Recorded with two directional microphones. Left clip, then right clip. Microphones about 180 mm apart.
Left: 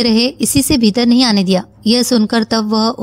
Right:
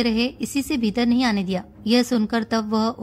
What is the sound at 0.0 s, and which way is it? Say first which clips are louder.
A woman's voice: left 9 dB; 40° left (ahead or behind).